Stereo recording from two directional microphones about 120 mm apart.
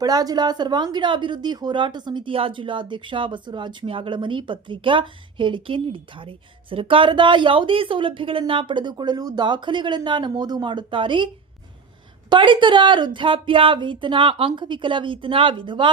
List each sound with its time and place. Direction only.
0.0 s speech: 35° right (ahead or behind)
12.3 s speech: 40° right (ahead or behind)